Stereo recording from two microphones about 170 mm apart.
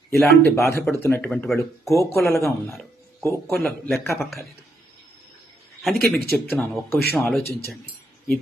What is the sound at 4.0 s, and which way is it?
Speech, 15° left (ahead or behind).